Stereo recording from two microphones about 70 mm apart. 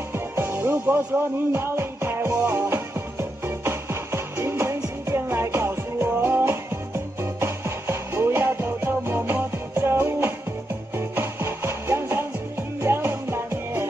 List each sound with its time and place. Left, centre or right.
0.1 s music: right